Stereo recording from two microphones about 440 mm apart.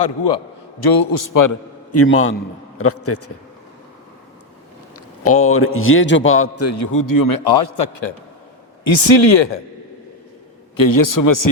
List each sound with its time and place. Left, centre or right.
0.8 s a man's voice: left
4.9 s a man's voice: left
8.8 s speech: left
10.8 s a man's voice: left